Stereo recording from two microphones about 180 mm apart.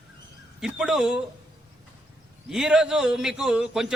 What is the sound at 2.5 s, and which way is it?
A man's voice, 5° right (ahead or behind).